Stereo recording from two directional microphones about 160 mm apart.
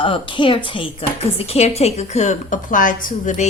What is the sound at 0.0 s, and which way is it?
A woman's voice, 30° left (ahead or behind).